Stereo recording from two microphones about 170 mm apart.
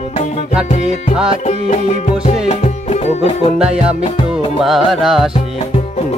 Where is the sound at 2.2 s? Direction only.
40° left (ahead or behind).